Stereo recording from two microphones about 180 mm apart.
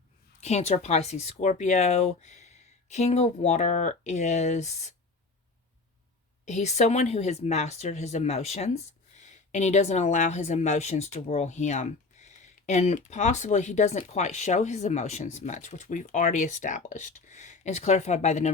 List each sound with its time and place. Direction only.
0.3 s speech: 40° left (ahead or behind)
6.4 s speech: 40° left (ahead or behind)